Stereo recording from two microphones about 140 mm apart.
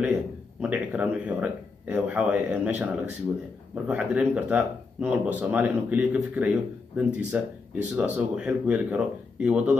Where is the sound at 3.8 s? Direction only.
10° right (ahead or behind).